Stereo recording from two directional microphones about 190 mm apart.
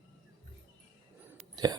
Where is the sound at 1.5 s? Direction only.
20° right (ahead or behind).